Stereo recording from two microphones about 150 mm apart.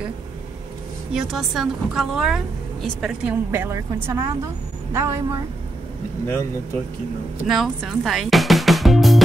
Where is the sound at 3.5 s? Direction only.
15° right (ahead or behind).